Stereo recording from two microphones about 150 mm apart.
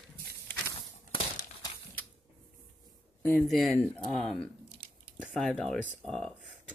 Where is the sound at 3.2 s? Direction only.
15° left (ahead or behind).